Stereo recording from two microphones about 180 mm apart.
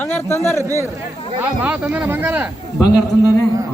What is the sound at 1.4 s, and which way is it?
Speech, 10° right (ahead or behind).